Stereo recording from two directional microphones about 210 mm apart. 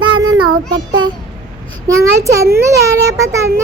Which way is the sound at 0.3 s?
90° right.